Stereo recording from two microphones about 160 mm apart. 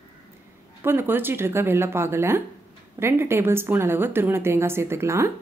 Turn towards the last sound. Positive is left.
turn(degrees=-15)  # may be behind; listen again after turning